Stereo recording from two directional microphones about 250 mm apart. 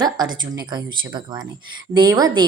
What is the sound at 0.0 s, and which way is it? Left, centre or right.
A woman's voice, centre.